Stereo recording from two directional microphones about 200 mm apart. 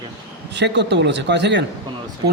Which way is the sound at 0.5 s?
60° right (ahead or behind).